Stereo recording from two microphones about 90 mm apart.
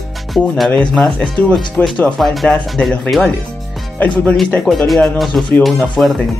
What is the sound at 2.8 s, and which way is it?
Speech, 15° left (ahead or behind).